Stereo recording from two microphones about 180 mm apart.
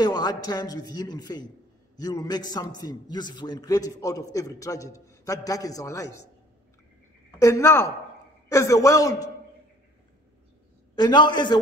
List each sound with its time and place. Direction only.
0.0 s a man's voice: 20° left (ahead or behind)
7.2 s a man's voice: 15° left (ahead or behind)
11.0 s a man's voice: 25° left (ahead or behind)